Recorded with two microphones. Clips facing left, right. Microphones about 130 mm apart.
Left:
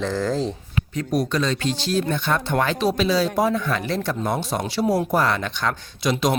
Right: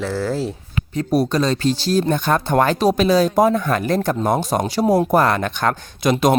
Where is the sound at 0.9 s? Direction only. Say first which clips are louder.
Right 5 dB; 35° right (ahead or behind).